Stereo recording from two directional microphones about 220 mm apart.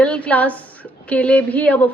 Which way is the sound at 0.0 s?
5° left (ahead or behind).